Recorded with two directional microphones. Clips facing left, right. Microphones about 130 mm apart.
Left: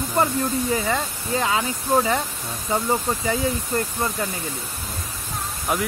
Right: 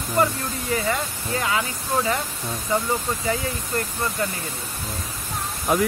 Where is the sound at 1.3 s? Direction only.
25° left (ahead or behind).